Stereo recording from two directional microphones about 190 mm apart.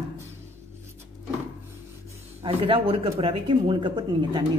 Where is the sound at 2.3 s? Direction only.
30° right (ahead or behind).